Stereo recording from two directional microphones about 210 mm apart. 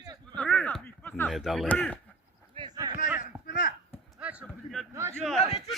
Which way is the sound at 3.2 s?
40° left (ahead or behind).